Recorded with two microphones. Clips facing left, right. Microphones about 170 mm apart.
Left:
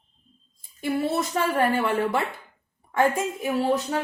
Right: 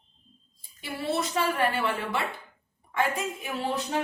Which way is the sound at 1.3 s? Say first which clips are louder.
Left 5 dB; 45° left (ahead or behind).